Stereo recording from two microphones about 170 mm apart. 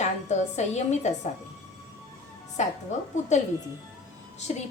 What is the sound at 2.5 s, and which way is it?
Speech, 45° left (ahead or behind).